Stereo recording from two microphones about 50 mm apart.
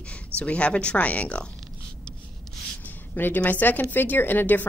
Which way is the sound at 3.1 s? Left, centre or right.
Left.